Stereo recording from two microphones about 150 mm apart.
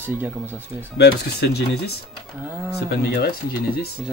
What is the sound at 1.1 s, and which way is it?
Speech, 90° left.